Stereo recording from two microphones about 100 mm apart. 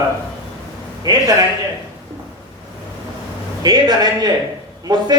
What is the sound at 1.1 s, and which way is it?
Speech, 40° right (ahead or behind).